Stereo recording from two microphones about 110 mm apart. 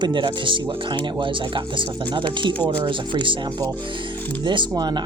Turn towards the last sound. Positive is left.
turn(degrees=-40)  # may be behind; listen again after turning